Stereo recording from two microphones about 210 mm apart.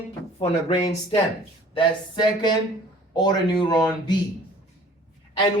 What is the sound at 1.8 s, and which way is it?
Speech, 20° left (ahead or behind).